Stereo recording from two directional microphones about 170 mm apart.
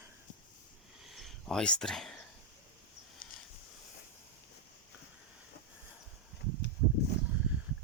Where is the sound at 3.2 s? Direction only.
55° left (ahead or behind).